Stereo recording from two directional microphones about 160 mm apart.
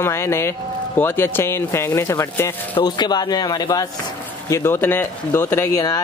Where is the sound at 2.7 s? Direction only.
25° left (ahead or behind).